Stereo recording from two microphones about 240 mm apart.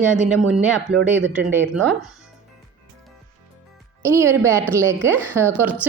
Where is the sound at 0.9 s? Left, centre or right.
Right.